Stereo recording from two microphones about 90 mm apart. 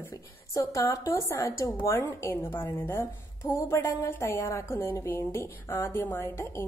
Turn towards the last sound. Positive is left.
turn(degrees=30)  # may be behind; listen again after turning